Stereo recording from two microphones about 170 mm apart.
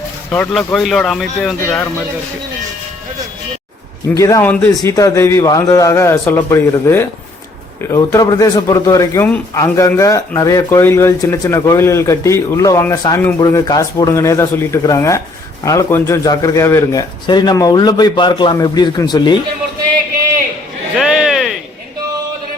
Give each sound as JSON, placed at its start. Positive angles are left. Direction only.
{"t": 0.3, "sound": "speech", "side_deg": 5}
{"t": 4.2, "sound": "a man's voice", "side_deg": 20}
{"t": 21.0, "sound": "a sound", "side_deg": 0}